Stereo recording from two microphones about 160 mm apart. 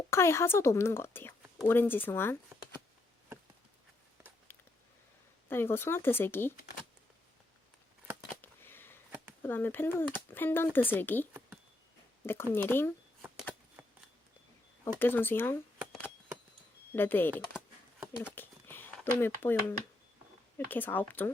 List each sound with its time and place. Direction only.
0.1 s speech: 15° left (ahead or behind)
5.5 s speech: 15° left (ahead or behind)
8.3 s a sound: 15° left (ahead or behind)
9.4 s speech: 15° left (ahead or behind)
13.8 s a sound: 15° right (ahead or behind)
14.9 s speech: 15° left (ahead or behind)
16.9 s speech: 10° left (ahead or behind)